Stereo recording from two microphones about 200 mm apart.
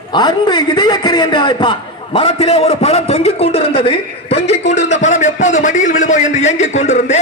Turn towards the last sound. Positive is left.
turn(degrees=35)  # may be behind; listen again after turning